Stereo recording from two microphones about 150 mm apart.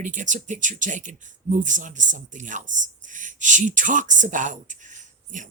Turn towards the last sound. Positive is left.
turn(degrees=-55)  # may be behind; listen again after turning